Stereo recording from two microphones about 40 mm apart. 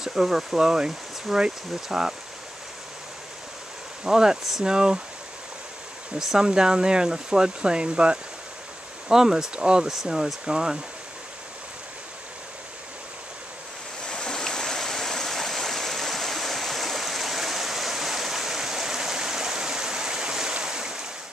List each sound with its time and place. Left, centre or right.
0.0 s speech: centre
4.0 s speech: centre
6.1 s speech: centre
9.1 s speech: centre
14.0 s stream: centre